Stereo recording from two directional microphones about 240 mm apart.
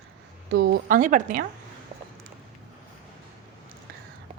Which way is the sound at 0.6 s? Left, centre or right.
Right.